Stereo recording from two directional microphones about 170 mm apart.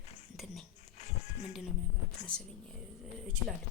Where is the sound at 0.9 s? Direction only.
45° left (ahead or behind).